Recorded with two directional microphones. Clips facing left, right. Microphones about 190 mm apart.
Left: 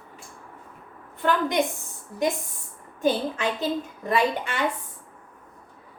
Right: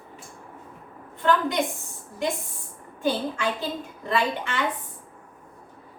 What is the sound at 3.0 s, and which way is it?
A woman's voice, 20° left (ahead or behind).